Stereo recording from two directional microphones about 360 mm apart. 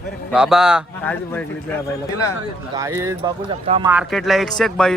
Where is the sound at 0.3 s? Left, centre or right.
Centre.